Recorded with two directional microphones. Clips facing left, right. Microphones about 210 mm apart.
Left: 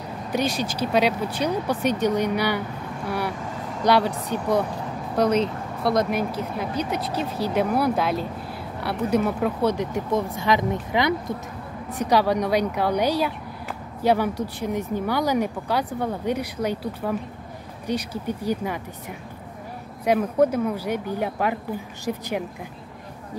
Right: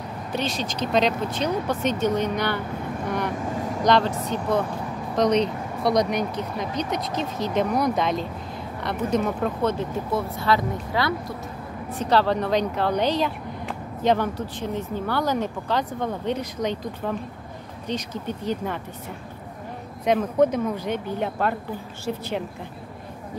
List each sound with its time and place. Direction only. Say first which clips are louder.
0.3 s speech: left 3 dB; 10° left (ahead or behind)
20.1 s speech: even; 10° left (ahead or behind)